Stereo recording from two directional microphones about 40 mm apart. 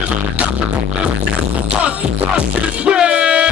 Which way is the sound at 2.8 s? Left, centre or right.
Right.